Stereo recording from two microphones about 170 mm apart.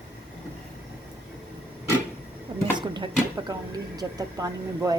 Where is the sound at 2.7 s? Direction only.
30° right (ahead or behind).